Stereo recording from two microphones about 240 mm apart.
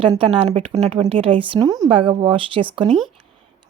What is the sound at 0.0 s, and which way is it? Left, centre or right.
Speech, right.